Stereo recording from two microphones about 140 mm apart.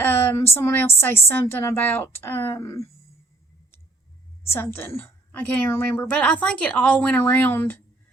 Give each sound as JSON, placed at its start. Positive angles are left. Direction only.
{"t": 0.0, "sound": "a sound", "side_deg": 15}
{"t": 0.9, "sound": "a woman's voice", "side_deg": 15}
{"t": 4.5, "sound": "a woman's voice", "side_deg": 15}